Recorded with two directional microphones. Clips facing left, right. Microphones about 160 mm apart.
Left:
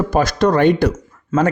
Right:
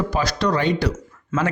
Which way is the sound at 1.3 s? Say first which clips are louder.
Left 6 dB; 35° left (ahead or behind).